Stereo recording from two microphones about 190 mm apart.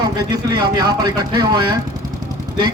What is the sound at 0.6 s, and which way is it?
A man's voice, 20° right (ahead or behind).